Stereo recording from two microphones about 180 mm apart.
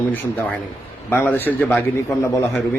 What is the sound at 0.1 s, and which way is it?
Speech, 10° left (ahead or behind).